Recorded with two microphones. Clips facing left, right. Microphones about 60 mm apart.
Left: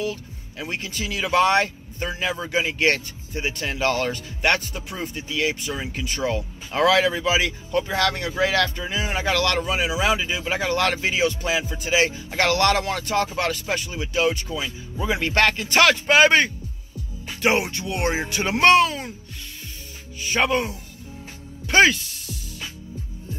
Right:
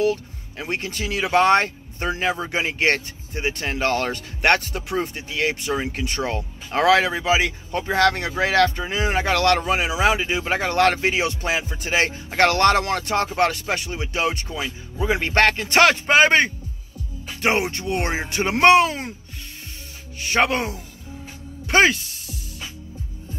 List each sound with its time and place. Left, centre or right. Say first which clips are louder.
0.0 s speech: right 7 dB; right
14.6 s speech: right 2 dB; right
18.6 s speech: right 2 dB; right
20.3 s speech: right 1 dB; right
21.6 s music: even; right